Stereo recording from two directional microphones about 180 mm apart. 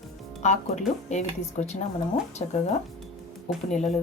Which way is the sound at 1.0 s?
40° left (ahead or behind).